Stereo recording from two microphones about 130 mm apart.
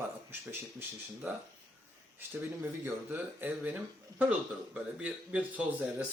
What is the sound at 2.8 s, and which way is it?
Speech, 15° right (ahead or behind).